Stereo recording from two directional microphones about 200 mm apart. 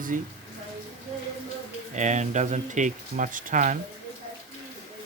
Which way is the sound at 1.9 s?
35° right (ahead or behind).